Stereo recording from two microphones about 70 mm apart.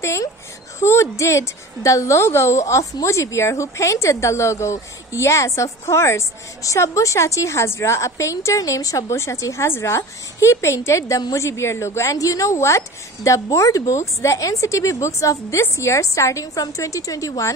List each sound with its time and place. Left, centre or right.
0.0 s a woman's voice: left